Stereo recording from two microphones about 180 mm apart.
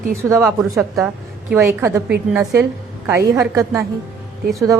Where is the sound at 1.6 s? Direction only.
15° right (ahead or behind).